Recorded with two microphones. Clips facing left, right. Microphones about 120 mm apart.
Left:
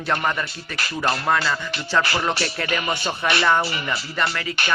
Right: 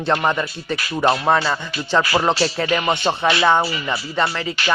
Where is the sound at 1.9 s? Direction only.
25° right (ahead or behind).